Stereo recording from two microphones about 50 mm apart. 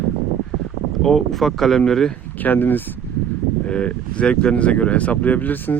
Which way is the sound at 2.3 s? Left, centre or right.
Left.